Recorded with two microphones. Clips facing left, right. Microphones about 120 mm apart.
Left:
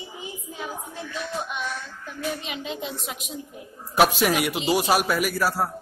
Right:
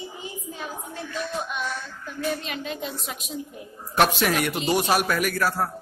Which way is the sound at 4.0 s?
5° left (ahead or behind).